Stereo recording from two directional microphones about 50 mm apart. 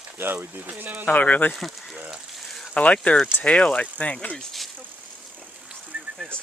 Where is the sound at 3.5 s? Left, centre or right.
Centre.